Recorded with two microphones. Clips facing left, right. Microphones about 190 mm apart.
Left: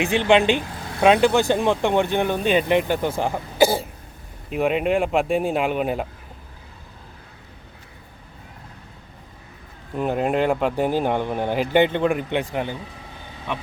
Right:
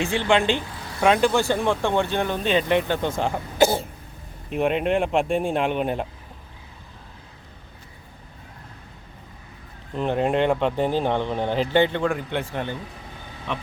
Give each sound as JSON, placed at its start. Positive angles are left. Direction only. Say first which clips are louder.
{"t": 0.0, "sound": "speech", "louder": "left 3 dB", "side_deg": 20}
{"t": 9.9, "sound": "speech", "louder": "even", "side_deg": 5}